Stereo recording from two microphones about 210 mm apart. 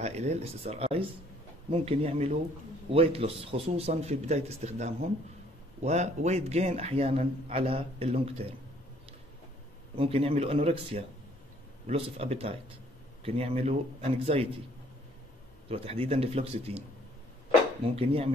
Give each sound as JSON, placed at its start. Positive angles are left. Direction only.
{"t": 0.0, "sound": "a man's voice", "side_deg": -30}
{"t": 9.9, "sound": "a man's voice", "side_deg": -30}
{"t": 15.7, "sound": "a man's voice", "side_deg": -30}
{"t": 17.9, "sound": "a man's voice", "side_deg": -25}